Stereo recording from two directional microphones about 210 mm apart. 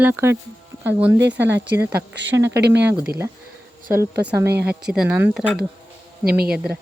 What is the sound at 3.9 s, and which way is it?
Speech, 10° right (ahead or behind).